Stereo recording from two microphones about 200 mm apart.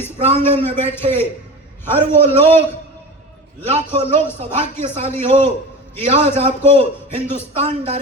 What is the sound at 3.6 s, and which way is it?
A man's voice, 30° right (ahead or behind).